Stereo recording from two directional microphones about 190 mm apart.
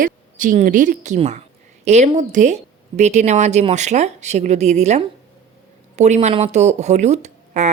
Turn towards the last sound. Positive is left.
turn(degrees=-35)  # may be behind; listen again after turning